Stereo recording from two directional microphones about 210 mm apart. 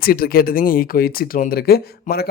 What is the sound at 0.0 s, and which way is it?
Speech, 45° left (ahead or behind).